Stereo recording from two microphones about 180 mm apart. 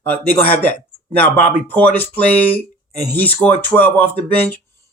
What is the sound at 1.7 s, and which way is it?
Speech, 10° left (ahead or behind).